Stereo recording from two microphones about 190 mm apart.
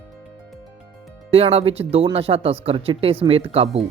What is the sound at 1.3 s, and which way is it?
Speech, 30° right (ahead or behind).